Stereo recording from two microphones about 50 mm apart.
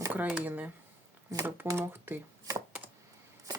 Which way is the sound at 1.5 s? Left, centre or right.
Right.